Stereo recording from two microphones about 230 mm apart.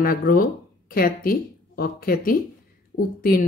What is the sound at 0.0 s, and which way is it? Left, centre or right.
Speech, left.